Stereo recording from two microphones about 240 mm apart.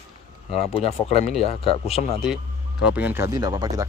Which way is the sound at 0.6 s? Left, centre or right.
Left.